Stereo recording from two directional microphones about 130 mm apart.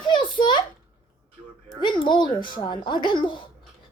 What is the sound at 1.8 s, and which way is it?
Speech, 35° left (ahead or behind).